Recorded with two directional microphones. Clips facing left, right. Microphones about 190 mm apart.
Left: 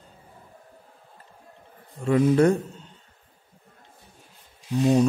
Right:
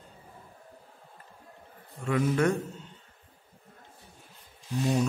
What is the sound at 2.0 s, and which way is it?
Speech, 35° left (ahead or behind).